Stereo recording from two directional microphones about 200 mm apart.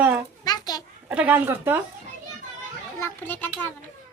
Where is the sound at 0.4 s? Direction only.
20° left (ahead or behind).